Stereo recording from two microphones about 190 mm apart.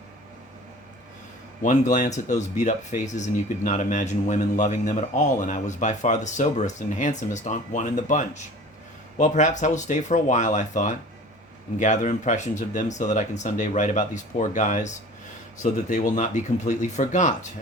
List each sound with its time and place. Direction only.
1.6 s speech: 40° left (ahead or behind)